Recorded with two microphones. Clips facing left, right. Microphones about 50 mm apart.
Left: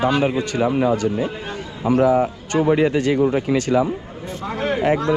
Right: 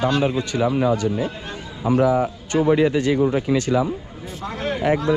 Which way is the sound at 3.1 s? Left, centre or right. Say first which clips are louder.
Left 1 dB; left.